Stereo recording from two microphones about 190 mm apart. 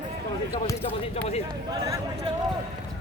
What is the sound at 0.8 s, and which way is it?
Speech, 30° left (ahead or behind).